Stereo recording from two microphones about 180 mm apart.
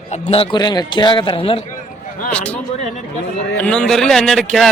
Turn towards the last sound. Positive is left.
turn(degrees=0)  # may be behind; listen again after turning